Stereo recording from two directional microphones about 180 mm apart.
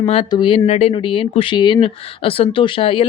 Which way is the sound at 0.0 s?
30° left (ahead or behind).